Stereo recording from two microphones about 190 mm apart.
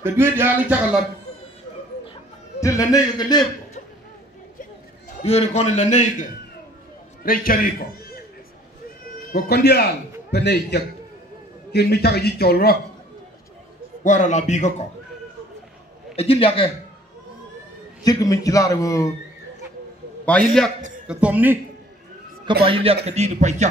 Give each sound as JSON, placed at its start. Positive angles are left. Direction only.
{"t": 0.0, "sound": "speech", "side_deg": -10}
{"t": 2.6, "sound": "a man's voice", "side_deg": 15}
{"t": 5.1, "sound": "a man's voice", "side_deg": 35}
{"t": 7.2, "sound": "a man's voice", "side_deg": 50}
{"t": 9.3, "sound": "speech", "side_deg": 60}
{"t": 14.0, "sound": "a man's voice", "side_deg": 40}
{"t": 16.2, "sound": "a man's voice", "side_deg": 30}
{"t": 18.0, "sound": "a man's voice", "side_deg": 20}
{"t": 20.3, "sound": "a man's voice", "side_deg": 5}
{"t": 21.1, "sound": "speech", "side_deg": -5}
{"t": 22.7, "sound": "a man's voice", "side_deg": -30}